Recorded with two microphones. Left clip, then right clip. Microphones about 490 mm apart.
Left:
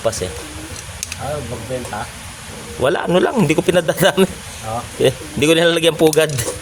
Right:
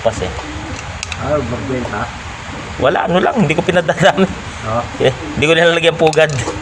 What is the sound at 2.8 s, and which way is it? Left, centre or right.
Speech, left.